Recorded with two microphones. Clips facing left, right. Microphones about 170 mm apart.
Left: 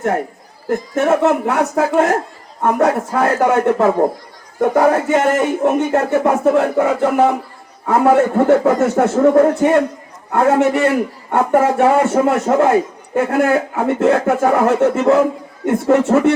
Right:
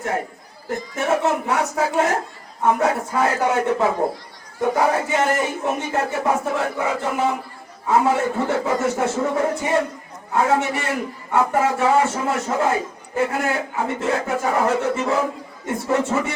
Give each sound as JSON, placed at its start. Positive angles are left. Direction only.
{"t": 1.0, "sound": "speech", "side_deg": 55}